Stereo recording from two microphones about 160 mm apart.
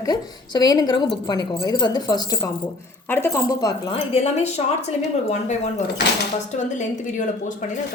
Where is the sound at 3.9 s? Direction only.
40° left (ahead or behind).